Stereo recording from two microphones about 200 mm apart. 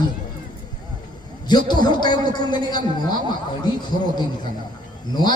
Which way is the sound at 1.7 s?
20° left (ahead or behind).